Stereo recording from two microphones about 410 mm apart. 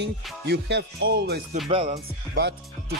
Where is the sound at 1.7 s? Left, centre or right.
Centre.